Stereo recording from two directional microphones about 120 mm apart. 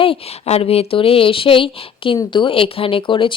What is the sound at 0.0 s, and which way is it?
A woman's voice, 55° left (ahead or behind).